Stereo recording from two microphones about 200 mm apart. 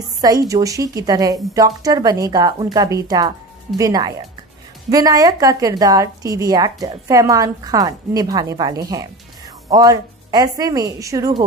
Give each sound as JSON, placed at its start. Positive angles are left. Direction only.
{"t": 0.5, "sound": "a woman's voice", "side_deg": -15}